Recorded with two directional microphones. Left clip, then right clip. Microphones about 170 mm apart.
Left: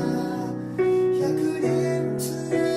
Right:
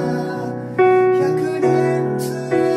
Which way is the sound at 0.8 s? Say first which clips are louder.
Right 7 dB; 5° left (ahead or behind).